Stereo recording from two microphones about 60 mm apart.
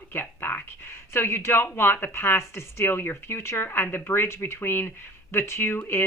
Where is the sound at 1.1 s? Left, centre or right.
Left.